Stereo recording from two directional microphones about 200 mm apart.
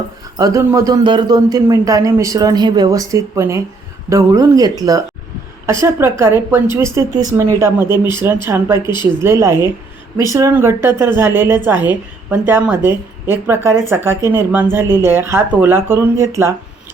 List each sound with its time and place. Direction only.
0.3 s speech: 15° right (ahead or behind)